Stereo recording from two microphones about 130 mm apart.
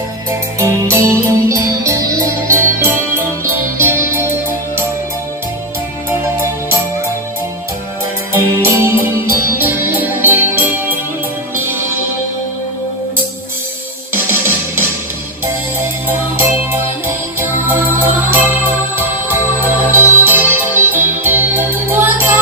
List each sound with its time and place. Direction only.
0.3 s music: 20° right (ahead or behind)
8.4 s music: 20° right (ahead or behind)
14.1 s music: 15° right (ahead or behind)
16.0 s music: 20° right (ahead or behind)